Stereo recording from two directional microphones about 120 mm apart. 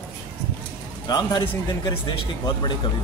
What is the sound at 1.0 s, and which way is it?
A man's voice, 35° left (ahead or behind).